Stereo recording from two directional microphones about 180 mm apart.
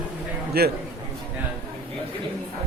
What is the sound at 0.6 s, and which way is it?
Speech, 60° right (ahead or behind).